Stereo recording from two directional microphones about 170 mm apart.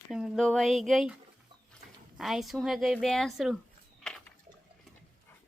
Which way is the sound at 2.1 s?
Centre (ahead or behind).